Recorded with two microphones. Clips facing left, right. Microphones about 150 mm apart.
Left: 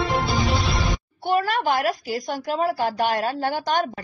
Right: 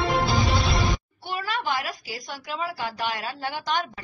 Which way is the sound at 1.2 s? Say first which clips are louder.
Left 11 dB; 45° left (ahead or behind).